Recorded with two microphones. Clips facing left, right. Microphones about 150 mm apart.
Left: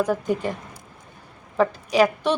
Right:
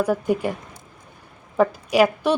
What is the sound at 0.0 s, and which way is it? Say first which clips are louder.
Speech: right 2 dB; 10° right (ahead or behind).